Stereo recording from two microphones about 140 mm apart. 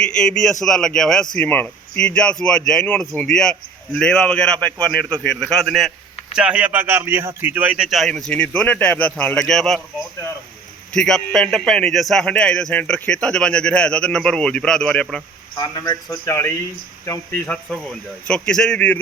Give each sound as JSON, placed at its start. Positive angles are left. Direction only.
{"t": 0.0, "sound": "a man's voice", "side_deg": 5}
{"t": 10.9, "sound": "a man's voice", "side_deg": 5}
{"t": 15.5, "sound": "speech", "side_deg": 30}